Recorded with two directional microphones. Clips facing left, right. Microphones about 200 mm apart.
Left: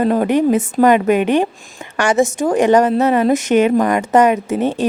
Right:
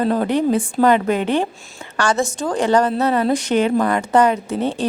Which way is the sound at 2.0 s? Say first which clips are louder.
Left 5 dB; 25° left (ahead or behind).